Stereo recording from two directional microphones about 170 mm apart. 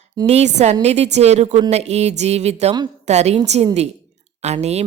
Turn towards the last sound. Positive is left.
turn(degrees=-40)  # may be behind; listen again after turning